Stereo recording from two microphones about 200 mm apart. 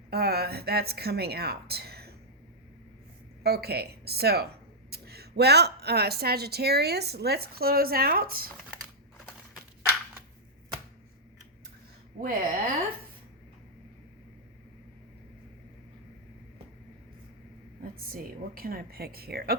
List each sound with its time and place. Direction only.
0.1 s a woman's voice: 50° right (ahead or behind)
3.4 s a woman's voice: 55° right (ahead or behind)
12.2 s a woman's voice: 45° right (ahead or behind)
18.1 s a woman's voice: 45° right (ahead or behind)